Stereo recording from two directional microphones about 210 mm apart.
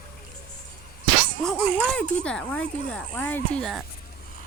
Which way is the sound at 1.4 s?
5° left (ahead or behind).